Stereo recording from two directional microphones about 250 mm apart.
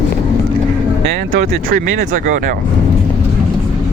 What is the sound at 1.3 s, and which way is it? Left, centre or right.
Speech, right.